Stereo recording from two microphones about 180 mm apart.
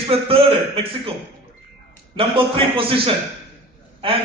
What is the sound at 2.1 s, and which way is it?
A man's voice, 30° right (ahead or behind).